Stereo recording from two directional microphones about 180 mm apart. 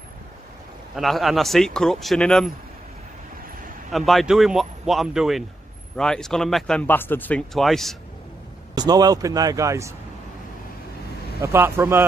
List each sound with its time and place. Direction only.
0.9 s speech: centre (ahead or behind)
3.9 s speech: centre (ahead or behind)
8.7 s speech: 20° right (ahead or behind)
11.4 s speech: 15° right (ahead or behind)